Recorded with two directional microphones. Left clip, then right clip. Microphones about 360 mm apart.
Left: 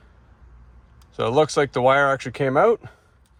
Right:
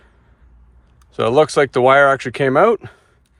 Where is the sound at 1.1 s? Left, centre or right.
Right.